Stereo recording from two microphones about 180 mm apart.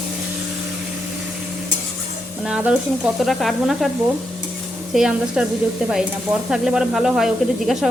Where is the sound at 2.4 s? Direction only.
5° right (ahead or behind).